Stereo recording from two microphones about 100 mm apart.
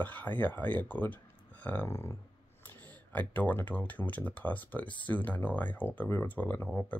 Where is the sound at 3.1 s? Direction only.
15° left (ahead or behind).